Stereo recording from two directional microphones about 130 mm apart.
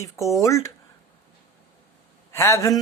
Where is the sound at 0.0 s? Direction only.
25° left (ahead or behind).